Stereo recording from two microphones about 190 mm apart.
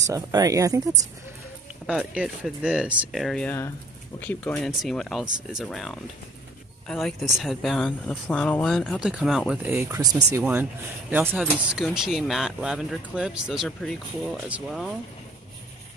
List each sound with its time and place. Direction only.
0.0 s speech: 20° right (ahead or behind)
1.9 s speech: 5° right (ahead or behind)